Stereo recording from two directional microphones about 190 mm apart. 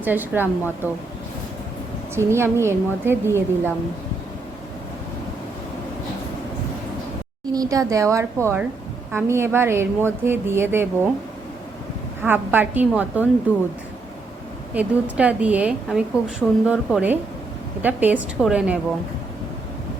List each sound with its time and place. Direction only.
0.0 s a woman's voice: 10° right (ahead or behind)
2.1 s a woman's voice: 15° right (ahead or behind)
7.5 s a woman's voice: 20° right (ahead or behind)
12.2 s a woman's voice: 10° right (ahead or behind)
14.8 s a woman's voice: 5° right (ahead or behind)